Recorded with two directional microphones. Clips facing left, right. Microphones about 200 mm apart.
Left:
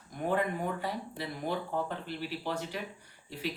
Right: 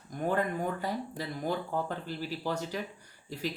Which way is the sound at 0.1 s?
45° right (ahead or behind).